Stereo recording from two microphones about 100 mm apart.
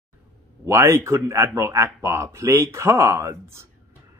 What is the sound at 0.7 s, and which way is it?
Speech, 30° right (ahead or behind).